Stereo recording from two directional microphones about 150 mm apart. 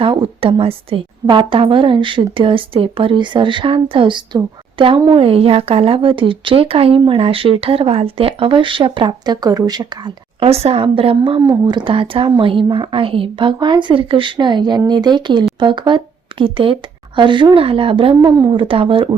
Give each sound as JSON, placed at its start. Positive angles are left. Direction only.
{"t": 0.0, "sound": "a woman's voice", "side_deg": -35}
{"t": 10.4, "sound": "a woman's voice", "side_deg": -45}